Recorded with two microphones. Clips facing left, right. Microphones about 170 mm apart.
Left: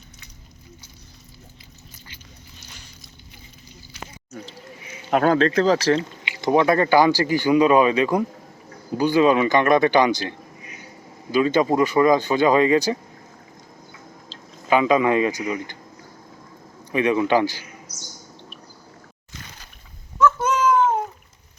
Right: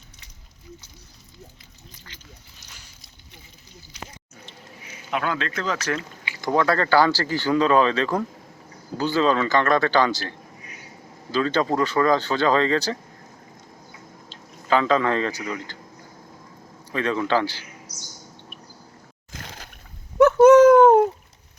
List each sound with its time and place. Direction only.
5.1 s speech: 40° left (ahead or behind); by 13.0 s 15° left (ahead or behind)
14.7 s speech: 15° left (ahead or behind)
16.9 s speech: 15° left (ahead or behind)
20.1 s a sound: 70° right (ahead or behind)